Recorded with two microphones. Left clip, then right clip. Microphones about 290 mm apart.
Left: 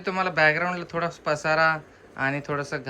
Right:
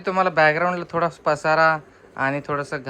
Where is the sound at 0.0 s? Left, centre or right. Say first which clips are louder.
Right 4 dB; centre.